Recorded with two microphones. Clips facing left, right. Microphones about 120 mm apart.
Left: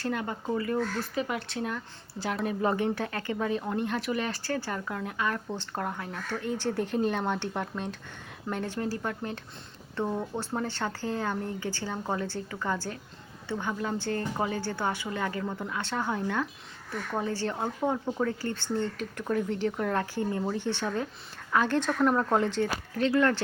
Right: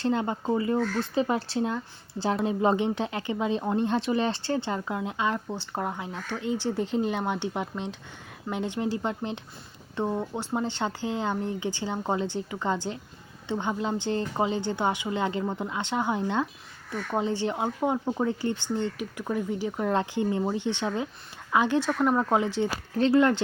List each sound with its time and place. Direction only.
0.0 s speech: 25° right (ahead or behind)
23.0 s speech: 30° right (ahead or behind)